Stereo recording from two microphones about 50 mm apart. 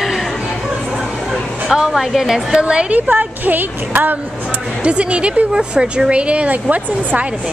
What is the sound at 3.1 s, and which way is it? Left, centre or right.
Speech, right.